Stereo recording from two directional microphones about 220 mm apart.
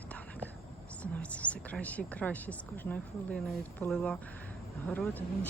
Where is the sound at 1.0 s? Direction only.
5° left (ahead or behind).